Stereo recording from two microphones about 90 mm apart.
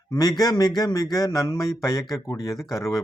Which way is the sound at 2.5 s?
Centre (ahead or behind).